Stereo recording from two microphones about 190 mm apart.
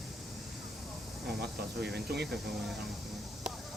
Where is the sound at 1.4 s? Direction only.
60° right (ahead or behind).